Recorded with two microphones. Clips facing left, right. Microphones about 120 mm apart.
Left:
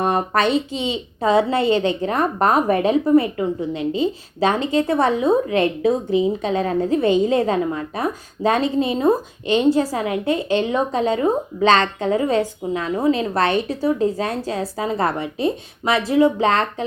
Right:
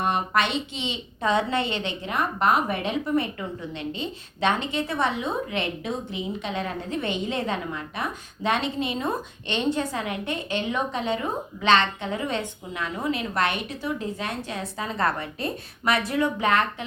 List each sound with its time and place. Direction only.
0.0 s a woman's voice: 35° left (ahead or behind)
14.8 s a woman's voice: 25° left (ahead or behind)